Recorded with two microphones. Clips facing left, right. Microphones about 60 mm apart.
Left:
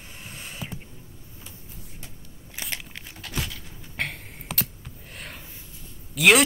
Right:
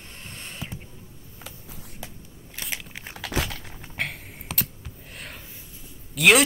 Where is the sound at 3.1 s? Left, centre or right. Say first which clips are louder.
Right 5 dB; right.